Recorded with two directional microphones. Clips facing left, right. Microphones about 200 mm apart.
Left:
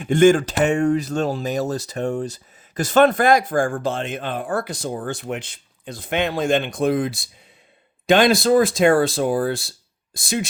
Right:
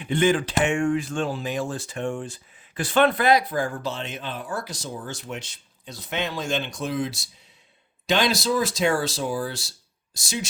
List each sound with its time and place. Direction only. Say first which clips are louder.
0.0 s speech: left 7 dB; 45° left (ahead or behind)